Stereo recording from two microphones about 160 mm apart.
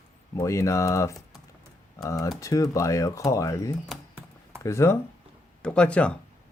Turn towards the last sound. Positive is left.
turn(degrees=5)  # may be behind; listen again after turning